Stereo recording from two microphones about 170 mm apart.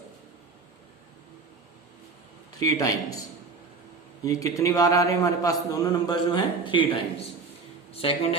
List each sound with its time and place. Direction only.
2.6 s a man's voice: 20° left (ahead or behind)
4.3 s a man's voice: 20° left (ahead or behind)